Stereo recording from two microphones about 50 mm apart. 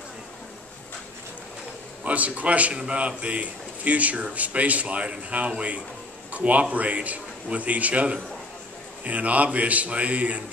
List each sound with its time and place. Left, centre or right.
2.0 s speech: right